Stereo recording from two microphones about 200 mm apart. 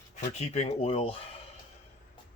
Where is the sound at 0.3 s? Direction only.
35° left (ahead or behind).